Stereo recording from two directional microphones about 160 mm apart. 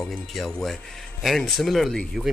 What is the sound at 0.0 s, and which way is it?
Speech, 5° left (ahead or behind).